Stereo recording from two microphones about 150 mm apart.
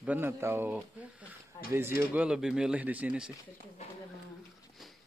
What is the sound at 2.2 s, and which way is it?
Speech, 5° right (ahead or behind).